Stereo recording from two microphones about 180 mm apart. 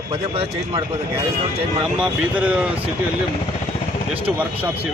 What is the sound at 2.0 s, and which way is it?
Speech, 5° right (ahead or behind).